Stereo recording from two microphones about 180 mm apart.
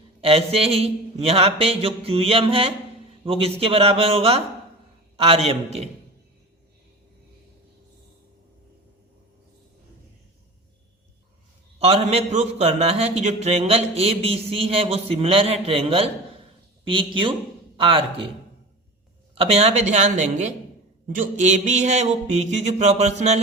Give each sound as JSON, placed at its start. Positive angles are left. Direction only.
{"t": 0.2, "sound": "speech", "side_deg": -35}
{"t": 11.8, "sound": "speech", "side_deg": -35}
{"t": 19.4, "sound": "speech", "side_deg": -35}